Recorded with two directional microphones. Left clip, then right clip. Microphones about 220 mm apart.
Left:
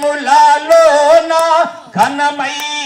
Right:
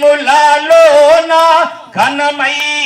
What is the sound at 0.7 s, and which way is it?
Music, 55° left (ahead or behind).